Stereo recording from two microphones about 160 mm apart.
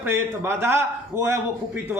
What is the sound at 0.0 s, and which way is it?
A man's voice, 15° right (ahead or behind).